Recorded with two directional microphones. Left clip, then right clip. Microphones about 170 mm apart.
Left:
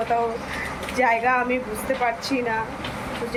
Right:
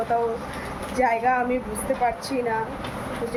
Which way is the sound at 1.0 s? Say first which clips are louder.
Left 1 dB; 15° right (ahead or behind).